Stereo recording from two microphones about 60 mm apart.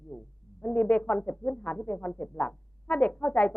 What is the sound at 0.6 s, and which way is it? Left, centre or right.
Speech, left.